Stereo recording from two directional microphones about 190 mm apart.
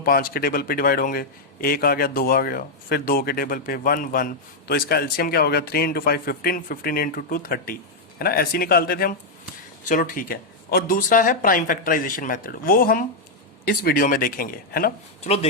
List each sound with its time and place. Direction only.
0.0 s a man's voice: 50° left (ahead or behind)